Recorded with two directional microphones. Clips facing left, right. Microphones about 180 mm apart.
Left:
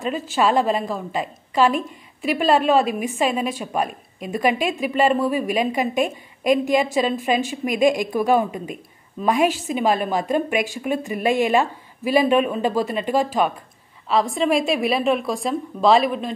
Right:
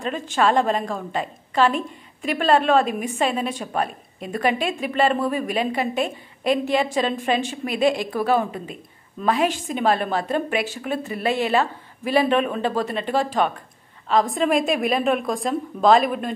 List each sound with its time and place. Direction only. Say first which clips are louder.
0.0 s a woman's voice: left 1 dB; 5° left (ahead or behind)